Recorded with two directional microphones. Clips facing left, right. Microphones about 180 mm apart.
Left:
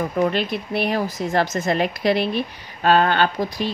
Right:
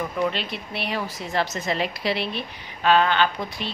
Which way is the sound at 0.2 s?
50° left (ahead or behind).